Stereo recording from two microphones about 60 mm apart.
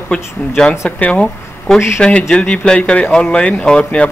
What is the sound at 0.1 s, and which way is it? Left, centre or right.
Speech, centre.